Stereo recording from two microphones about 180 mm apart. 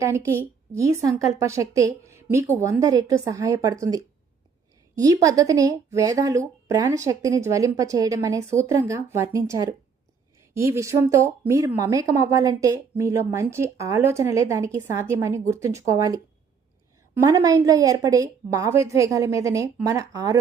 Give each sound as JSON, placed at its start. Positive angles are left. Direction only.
{"t": 0.0, "sound": "a woman's voice", "side_deg": -15}